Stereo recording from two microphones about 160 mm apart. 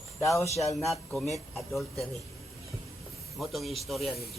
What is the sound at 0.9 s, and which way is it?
A man's voice, centre (ahead or behind).